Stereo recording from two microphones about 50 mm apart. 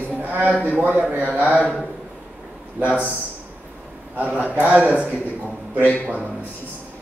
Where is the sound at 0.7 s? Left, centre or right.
Right.